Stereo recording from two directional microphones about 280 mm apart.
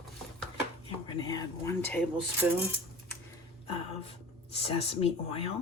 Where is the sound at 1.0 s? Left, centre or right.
Centre.